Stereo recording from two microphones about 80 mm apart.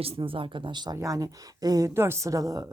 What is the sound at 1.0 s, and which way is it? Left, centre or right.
Speech, right.